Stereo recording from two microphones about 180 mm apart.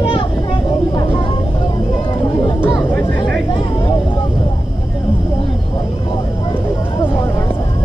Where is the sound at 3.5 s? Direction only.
25° left (ahead or behind).